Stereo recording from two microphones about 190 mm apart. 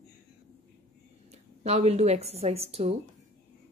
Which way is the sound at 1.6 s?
35° right (ahead or behind).